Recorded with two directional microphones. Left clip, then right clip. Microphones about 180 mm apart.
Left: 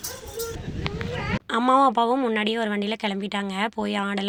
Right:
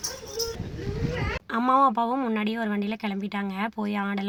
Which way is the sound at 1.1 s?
60° right (ahead or behind).